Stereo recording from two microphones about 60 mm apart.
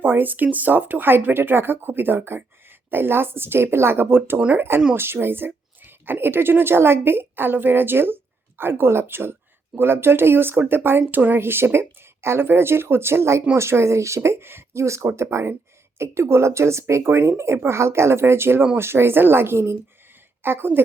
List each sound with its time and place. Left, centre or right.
0.0 s speech: right
4.4 s speech: right
4.9 s a woman's voice: right